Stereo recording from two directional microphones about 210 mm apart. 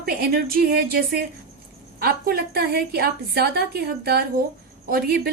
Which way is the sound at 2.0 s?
45° right (ahead or behind).